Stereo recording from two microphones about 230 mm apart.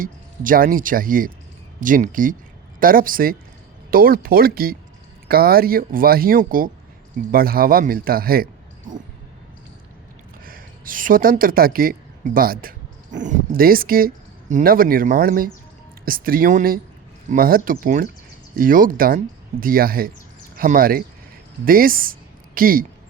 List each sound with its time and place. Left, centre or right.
0.0 s speech: right
10.4 s speech: right